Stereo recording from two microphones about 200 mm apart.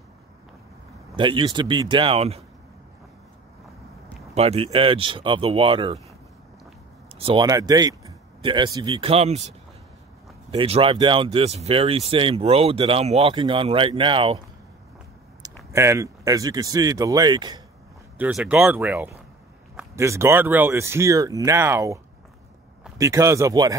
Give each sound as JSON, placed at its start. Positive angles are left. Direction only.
{"t": 1.1, "sound": "speech", "side_deg": -25}
{"t": 4.4, "sound": "speech", "side_deg": -30}
{"t": 7.2, "sound": "speech", "side_deg": -25}
{"t": 15.7, "sound": "speech", "side_deg": -15}
{"t": 18.1, "sound": "speech", "side_deg": -5}